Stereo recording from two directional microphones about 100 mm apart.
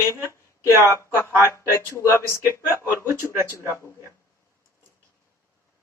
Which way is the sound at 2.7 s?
25° right (ahead or behind).